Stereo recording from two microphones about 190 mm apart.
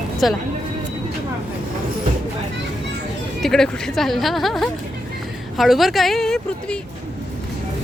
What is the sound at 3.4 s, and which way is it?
Speech, 5° left (ahead or behind).